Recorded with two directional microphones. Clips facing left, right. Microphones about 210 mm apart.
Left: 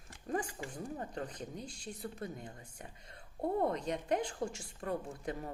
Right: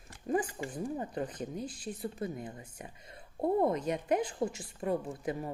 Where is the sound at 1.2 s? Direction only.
5° right (ahead or behind).